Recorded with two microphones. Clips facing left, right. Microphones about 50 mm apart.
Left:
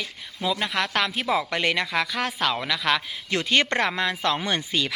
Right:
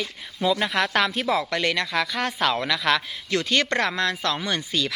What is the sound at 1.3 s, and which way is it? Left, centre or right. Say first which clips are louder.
A woman's voice: even; centre.